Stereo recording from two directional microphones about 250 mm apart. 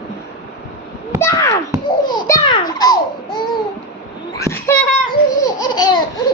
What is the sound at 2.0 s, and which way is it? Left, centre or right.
Babbling, centre.